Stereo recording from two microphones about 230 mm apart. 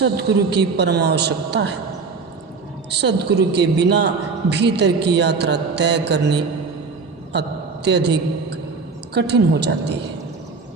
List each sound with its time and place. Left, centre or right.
0.0 s a woman's voice: right
2.9 s a woman's voice: right
7.9 s a woman's voice: right